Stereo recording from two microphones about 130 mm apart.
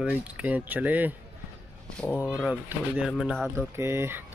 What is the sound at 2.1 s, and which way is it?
Speech, 5° right (ahead or behind).